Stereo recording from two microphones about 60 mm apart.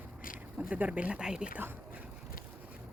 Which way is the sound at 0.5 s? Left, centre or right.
Right.